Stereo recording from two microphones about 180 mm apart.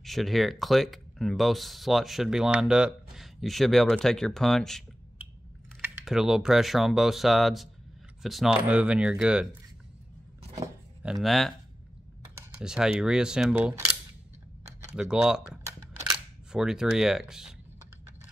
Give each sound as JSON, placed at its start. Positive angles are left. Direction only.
{"t": 0.0, "sound": "speech", "side_deg": 0}
{"t": 11.0, "sound": "speech", "side_deg": -5}
{"t": 12.5, "sound": "speech", "side_deg": -5}
{"t": 14.6, "sound": "typing", "side_deg": -15}
{"t": 15.0, "sound": "speech", "side_deg": -5}
{"t": 15.6, "sound": "a sound", "side_deg": -20}
{"t": 16.5, "sound": "speech", "side_deg": -5}